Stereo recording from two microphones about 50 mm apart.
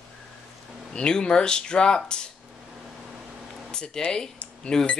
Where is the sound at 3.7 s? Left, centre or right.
Centre.